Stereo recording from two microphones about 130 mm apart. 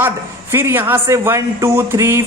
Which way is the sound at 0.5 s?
15° right (ahead or behind).